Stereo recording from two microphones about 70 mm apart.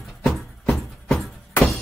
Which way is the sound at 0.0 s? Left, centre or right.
Centre.